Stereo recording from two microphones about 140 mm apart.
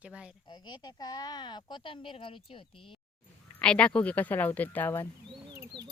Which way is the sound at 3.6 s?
10° left (ahead or behind).